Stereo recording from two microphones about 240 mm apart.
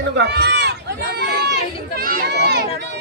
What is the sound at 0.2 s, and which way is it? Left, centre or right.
Speech, right.